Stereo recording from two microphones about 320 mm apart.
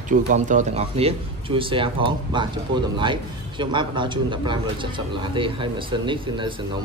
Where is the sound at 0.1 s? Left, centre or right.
Right.